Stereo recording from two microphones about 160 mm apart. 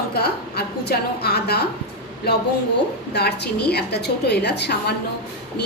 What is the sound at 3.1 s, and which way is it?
A woman's voice, 90° left.